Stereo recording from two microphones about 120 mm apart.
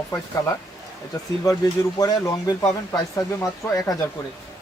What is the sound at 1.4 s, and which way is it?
Speech, 30° left (ahead or behind).